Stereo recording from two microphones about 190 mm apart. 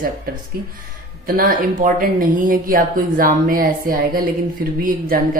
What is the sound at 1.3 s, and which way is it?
Speech, 50° right (ahead or behind).